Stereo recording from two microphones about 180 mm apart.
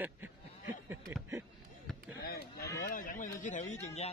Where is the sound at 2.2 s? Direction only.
60° left (ahead or behind); by 4.1 s 35° left (ahead or behind).